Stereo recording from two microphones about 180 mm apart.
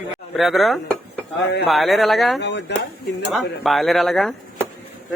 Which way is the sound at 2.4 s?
70° left (ahead or behind).